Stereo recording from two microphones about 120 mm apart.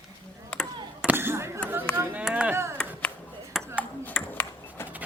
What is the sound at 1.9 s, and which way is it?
Chop, 20° right (ahead or behind).